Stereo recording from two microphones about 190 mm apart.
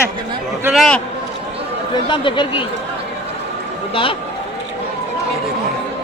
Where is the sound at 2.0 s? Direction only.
25° left (ahead or behind).